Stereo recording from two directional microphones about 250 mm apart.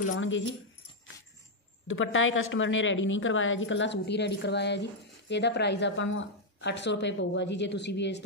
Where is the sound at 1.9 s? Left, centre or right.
Left.